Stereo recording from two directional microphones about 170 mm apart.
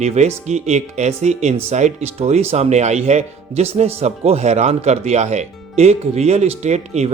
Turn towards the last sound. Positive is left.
turn(degrees=-40)  # may be behind; listen again after turning